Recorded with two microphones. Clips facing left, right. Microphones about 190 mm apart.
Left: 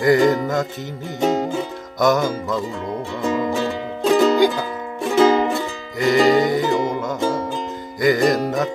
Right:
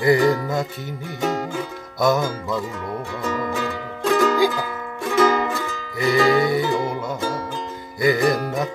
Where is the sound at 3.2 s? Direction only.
25° left (ahead or behind).